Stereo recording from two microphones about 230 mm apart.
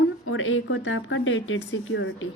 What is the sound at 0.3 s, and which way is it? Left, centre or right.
A woman's voice, left.